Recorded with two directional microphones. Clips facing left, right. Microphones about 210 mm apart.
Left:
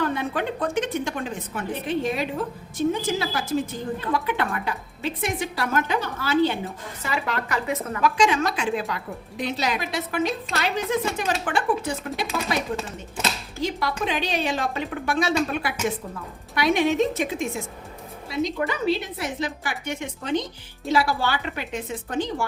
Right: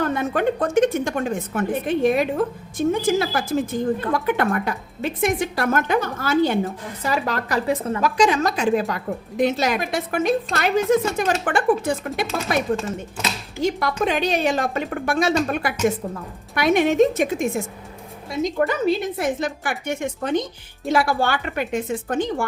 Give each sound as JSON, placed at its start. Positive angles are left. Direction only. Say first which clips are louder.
{"t": 0.0, "sound": "a woman's voice", "louder": "right 5 dB", "side_deg": -45}
{"t": 13.6, "sound": "a woman's voice", "louder": "right 5 dB", "side_deg": -50}
{"t": 16.6, "sound": "a woman's voice", "louder": "right 4 dB", "side_deg": -50}